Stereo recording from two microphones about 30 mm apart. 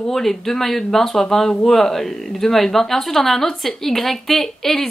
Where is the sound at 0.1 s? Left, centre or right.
Centre.